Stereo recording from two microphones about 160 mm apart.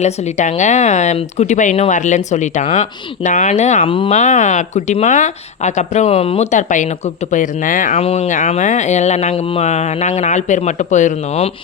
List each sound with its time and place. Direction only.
0.0 s speech: 50° left (ahead or behind)
3.8 s speech: 30° left (ahead or behind)
4.1 s speech: 50° left (ahead or behind)
7.9 s speech: 40° left (ahead or behind)